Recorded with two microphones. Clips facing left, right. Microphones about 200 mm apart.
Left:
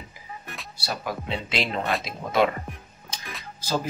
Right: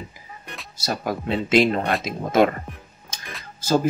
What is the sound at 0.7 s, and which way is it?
Speech, 45° right (ahead or behind).